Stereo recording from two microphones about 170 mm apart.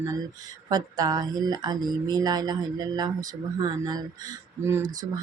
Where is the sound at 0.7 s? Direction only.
20° right (ahead or behind).